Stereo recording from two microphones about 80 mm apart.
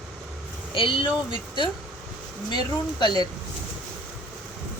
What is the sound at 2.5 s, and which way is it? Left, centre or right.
Speech, left.